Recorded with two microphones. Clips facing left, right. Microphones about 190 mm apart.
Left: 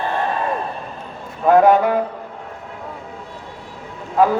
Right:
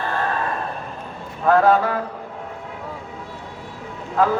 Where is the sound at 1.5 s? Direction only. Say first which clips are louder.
Left 3 dB; 15° left (ahead or behind).